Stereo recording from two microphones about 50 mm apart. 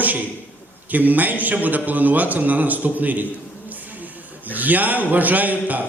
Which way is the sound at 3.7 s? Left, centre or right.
Right.